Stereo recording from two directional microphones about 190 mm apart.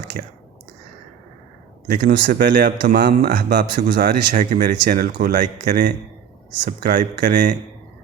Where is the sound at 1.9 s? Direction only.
55° right (ahead or behind).